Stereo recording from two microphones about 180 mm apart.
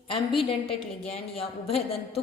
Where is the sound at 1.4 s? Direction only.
35° left (ahead or behind).